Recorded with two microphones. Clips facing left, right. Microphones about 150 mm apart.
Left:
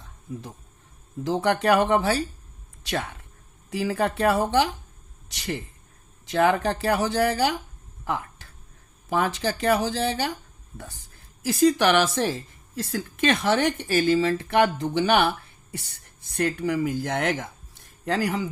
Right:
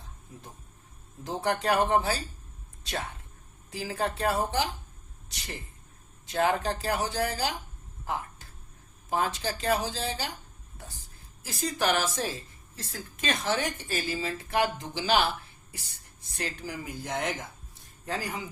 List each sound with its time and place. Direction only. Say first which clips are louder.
1.2 s speech: left 6 dB; 70° left (ahead or behind)
8.0 s a sound: left 4 dB; 65° left (ahead or behind)
9.0 s speech: left 5 dB; 70° left (ahead or behind)
11.4 s speech: left 9 dB; 75° left (ahead or behind)